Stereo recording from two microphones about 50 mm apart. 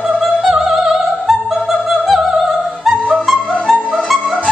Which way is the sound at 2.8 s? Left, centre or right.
Centre.